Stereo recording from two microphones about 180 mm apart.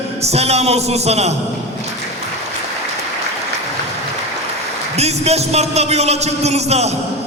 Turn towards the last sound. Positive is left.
turn(degrees=-35)  # may be behind; listen again after turning